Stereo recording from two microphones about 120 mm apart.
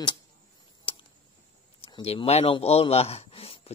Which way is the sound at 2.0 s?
60° left (ahead or behind).